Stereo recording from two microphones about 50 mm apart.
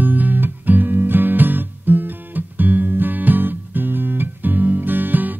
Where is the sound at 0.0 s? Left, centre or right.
Right.